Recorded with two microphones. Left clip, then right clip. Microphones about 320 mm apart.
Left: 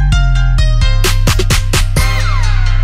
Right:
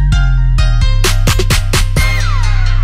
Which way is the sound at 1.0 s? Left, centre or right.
Right.